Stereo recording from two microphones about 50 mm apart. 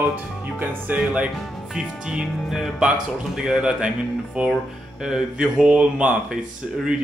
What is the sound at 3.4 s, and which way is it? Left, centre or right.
Music, centre.